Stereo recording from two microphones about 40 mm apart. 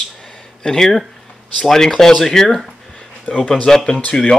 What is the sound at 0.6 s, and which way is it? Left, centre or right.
Speech, centre.